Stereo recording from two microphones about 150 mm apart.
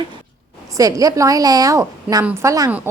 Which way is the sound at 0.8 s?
25° right (ahead or behind).